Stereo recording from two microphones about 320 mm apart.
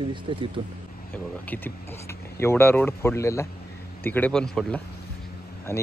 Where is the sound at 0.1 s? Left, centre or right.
Centre.